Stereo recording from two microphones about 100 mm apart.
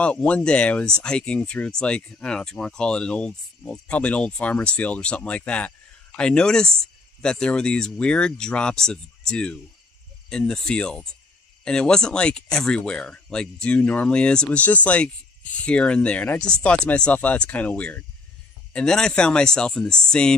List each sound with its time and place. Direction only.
0.0 s speech: 15° left (ahead or behind)